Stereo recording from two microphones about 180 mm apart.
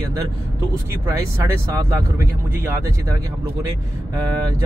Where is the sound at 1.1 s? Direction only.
15° right (ahead or behind).